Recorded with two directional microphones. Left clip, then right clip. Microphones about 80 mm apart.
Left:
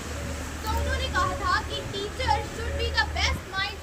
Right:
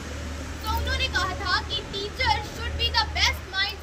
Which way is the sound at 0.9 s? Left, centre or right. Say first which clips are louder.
Even; centre.